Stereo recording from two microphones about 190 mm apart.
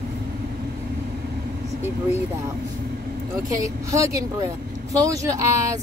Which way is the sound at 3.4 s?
15° right (ahead or behind).